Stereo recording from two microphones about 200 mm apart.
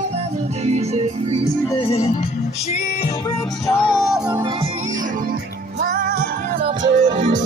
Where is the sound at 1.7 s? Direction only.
30° left (ahead or behind).